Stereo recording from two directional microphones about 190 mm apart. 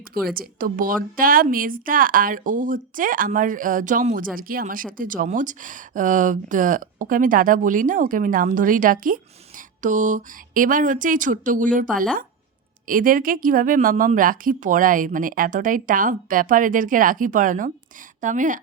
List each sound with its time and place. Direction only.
0.3 s speech: 50° right (ahead or behind)